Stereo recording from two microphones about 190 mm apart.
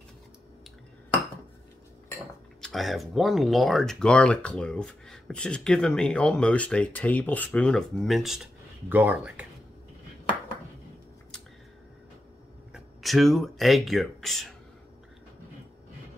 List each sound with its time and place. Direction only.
2.6 s speech: centre (ahead or behind)
12.7 s speech: centre (ahead or behind)